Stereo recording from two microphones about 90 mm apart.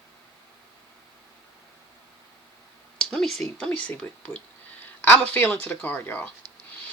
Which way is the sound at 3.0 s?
5° left (ahead or behind).